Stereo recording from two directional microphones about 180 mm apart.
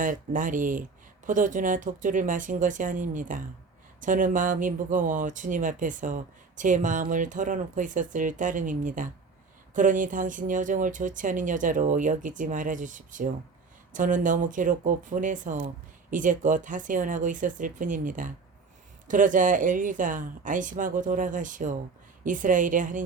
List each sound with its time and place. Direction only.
0.0 s speech: 50° right (ahead or behind)